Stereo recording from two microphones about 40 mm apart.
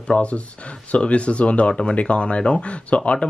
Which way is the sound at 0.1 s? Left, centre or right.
Left.